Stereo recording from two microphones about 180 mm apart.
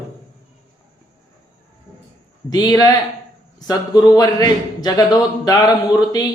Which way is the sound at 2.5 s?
20° left (ahead or behind).